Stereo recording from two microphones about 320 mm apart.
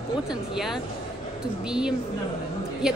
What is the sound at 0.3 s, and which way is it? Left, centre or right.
A woman's voice, centre.